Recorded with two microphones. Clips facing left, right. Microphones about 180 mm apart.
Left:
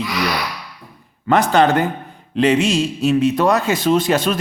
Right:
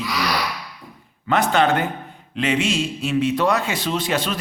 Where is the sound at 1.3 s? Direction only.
40° left (ahead or behind).